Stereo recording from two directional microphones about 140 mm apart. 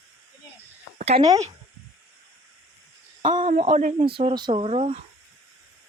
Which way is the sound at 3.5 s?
55° right (ahead or behind).